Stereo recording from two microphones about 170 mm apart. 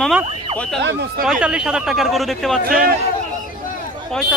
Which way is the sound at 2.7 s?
60° right (ahead or behind).